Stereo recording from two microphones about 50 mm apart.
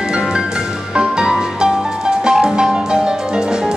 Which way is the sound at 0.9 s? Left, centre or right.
Centre.